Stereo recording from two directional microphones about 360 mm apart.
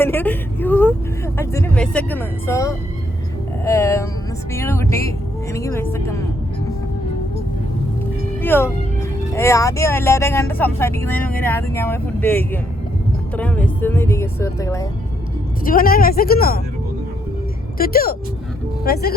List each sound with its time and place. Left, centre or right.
0.0 s speech: centre
8.4 s speech: centre
15.6 s speech: left
17.7 s speech: left